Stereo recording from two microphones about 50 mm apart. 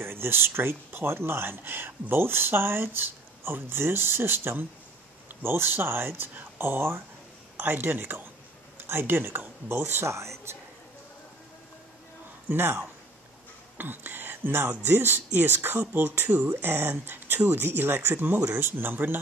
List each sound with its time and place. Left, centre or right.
0.0 s speech: right
10.0 s speech: right
12.4 s speech: right